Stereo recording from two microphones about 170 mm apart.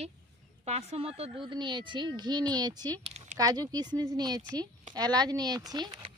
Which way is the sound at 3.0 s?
40° right (ahead or behind).